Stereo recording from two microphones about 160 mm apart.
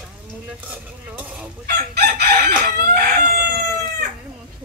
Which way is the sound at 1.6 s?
80° right.